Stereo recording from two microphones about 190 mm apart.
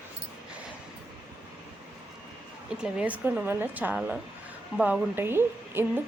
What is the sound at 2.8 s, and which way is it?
Speech, 5° right (ahead or behind).